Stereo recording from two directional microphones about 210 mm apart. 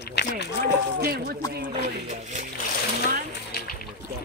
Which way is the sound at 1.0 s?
45° right (ahead or behind).